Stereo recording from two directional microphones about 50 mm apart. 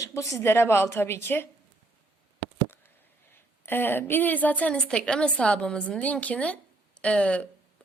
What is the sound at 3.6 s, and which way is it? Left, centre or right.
Speech, left.